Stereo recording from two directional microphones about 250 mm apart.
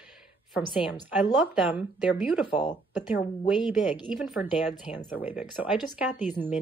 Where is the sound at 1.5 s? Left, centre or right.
Centre.